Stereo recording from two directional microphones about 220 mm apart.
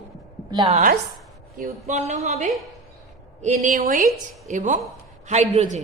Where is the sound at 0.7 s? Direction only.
40° right (ahead or behind).